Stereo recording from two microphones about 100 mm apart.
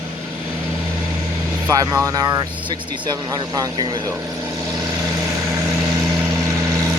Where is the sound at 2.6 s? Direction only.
50° right (ahead or behind).